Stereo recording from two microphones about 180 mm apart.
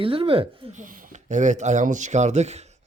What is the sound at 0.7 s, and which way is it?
Speech, 45° right (ahead or behind).